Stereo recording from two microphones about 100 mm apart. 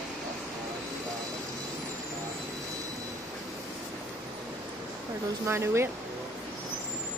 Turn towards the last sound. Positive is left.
turn(degrees=-25)  # may be behind; listen again after turning